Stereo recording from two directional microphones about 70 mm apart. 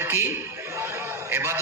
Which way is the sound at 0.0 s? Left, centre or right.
Right.